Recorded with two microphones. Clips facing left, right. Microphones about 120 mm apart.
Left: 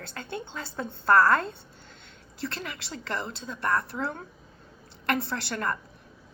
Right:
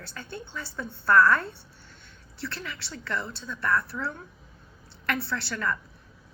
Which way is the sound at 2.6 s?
50° left (ahead or behind).